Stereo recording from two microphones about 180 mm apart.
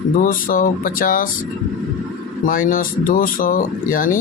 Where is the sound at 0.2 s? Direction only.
50° left (ahead or behind).